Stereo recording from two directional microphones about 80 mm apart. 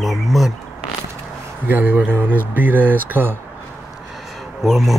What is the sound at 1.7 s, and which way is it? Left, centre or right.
Speech, right.